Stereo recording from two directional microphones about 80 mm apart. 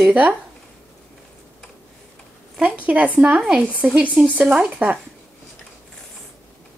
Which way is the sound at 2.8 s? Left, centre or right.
Centre.